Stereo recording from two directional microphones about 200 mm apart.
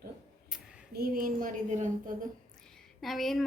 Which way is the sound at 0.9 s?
50° right (ahead or behind).